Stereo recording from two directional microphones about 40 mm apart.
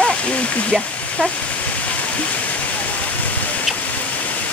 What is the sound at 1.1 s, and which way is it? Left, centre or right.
Rain, left.